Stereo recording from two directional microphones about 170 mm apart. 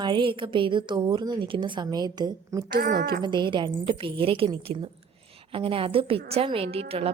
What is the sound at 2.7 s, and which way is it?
Speech, 60° right (ahead or behind).